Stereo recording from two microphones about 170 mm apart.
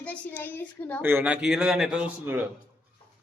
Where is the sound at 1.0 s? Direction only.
10° right (ahead or behind).